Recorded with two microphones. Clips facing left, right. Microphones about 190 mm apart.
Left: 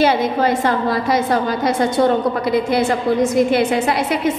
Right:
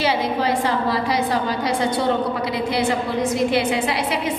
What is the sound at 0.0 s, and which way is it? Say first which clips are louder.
A woman's voice: left 5 dB; 45° left (ahead or behind).